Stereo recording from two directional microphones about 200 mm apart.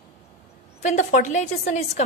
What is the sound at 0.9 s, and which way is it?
A woman's voice, 35° left (ahead or behind).